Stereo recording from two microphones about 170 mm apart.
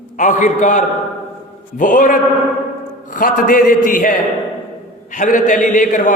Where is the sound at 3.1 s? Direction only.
50° left (ahead or behind).